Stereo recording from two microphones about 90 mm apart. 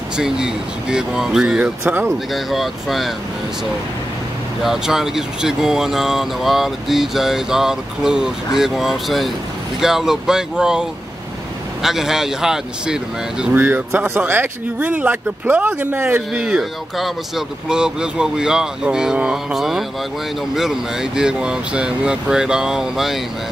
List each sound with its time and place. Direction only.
0.2 s speech: 5° right (ahead or behind)
4.6 s speech: 5° right (ahead or behind); by 16.4 s 25° right (ahead or behind)
16.4 s speech: 5° right (ahead or behind)